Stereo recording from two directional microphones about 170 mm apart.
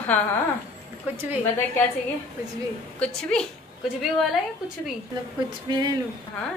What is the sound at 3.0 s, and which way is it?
Speech, 5° left (ahead or behind).